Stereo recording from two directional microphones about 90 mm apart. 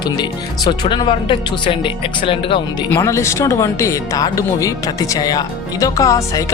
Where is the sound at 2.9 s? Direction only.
30° left (ahead or behind).